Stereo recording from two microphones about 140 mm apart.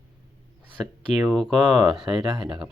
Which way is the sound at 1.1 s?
Centre (ahead or behind).